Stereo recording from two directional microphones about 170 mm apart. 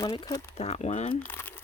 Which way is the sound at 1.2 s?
10° left (ahead or behind).